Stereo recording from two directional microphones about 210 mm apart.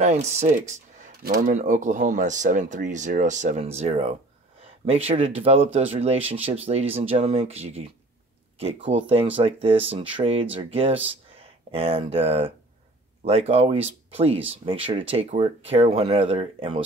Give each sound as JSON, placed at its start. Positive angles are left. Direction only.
{"t": 0.0, "sound": "speech", "side_deg": -30}